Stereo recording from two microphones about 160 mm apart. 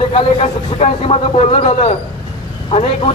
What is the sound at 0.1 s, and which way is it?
A man's voice, 35° left (ahead or behind).